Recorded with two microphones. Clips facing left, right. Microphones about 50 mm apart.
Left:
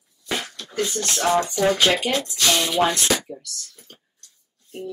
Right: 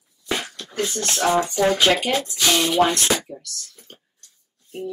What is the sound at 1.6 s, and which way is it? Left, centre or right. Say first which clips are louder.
Speech: right 2 dB; centre.